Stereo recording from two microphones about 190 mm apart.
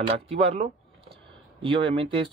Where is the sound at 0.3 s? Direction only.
35° right (ahead or behind).